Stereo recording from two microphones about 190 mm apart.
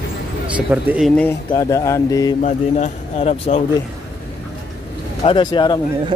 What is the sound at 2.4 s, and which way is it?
Speech, 35° left (ahead or behind).